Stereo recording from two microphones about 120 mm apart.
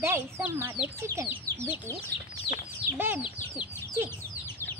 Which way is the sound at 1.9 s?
20° left (ahead or behind).